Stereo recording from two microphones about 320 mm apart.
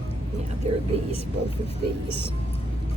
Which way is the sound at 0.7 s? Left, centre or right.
Centre.